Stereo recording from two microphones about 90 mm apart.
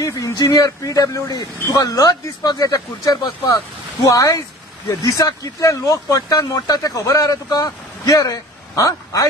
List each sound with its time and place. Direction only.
0.0 s speech: 35° left (ahead or behind)